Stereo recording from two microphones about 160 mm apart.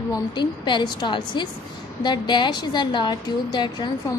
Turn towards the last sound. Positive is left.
turn(degrees=25)  # may be behind; listen again after turning